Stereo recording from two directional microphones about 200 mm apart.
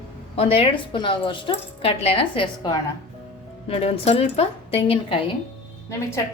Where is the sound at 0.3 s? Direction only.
30° left (ahead or behind).